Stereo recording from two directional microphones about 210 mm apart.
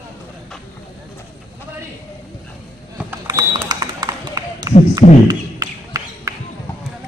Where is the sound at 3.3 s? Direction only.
20° right (ahead or behind).